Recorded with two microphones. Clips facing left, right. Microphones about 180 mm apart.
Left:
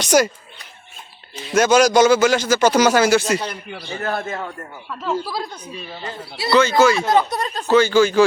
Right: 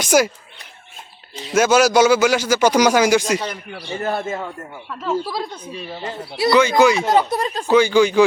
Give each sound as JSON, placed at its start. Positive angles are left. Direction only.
{"t": 0.0, "sound": "speech", "side_deg": -10}
{"t": 1.5, "sound": "a man's voice", "side_deg": -5}
{"t": 5.0, "sound": "a man's voice", "side_deg": 0}